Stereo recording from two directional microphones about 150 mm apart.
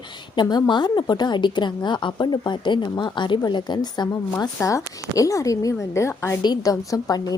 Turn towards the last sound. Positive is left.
turn(degrees=25)  # may be behind; listen again after turning